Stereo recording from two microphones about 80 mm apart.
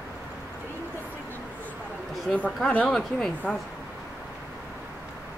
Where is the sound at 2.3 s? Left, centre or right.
Centre.